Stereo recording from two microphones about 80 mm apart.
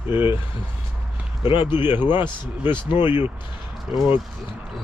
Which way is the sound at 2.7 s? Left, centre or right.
Left.